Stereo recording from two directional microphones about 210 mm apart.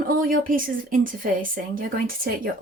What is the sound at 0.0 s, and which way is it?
A woman's voice, 40° right (ahead or behind).